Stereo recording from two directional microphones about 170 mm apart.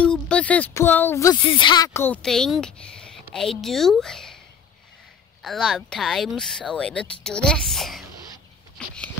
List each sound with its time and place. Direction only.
0.0 s speech: 5° left (ahead or behind)
1.4 s speech: 30° left (ahead or behind)
2.0 s a woman's voice: 10° left (ahead or behind)
5.4 s a woman's voice: centre (ahead or behind)
8.7 s a sound: 5° left (ahead or behind)